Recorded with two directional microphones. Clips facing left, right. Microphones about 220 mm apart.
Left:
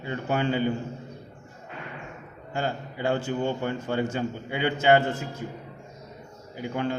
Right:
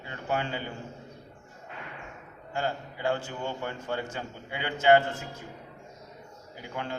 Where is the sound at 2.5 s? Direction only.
20° left (ahead or behind).